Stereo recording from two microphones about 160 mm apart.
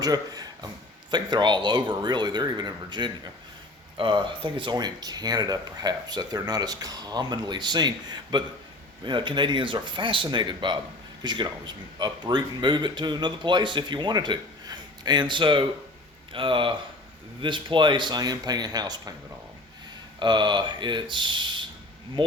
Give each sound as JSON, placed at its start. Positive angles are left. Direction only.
{"t": 0.0, "sound": "speech", "side_deg": -25}
{"t": 20.1, "sound": "speech", "side_deg": -30}